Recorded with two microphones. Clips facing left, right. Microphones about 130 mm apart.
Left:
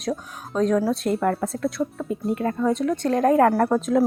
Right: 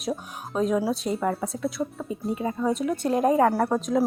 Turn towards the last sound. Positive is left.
turn(degrees=0)  # may be behind; listen again after turning